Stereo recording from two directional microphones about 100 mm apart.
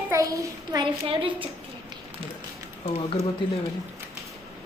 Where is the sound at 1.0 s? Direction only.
65° right (ahead or behind).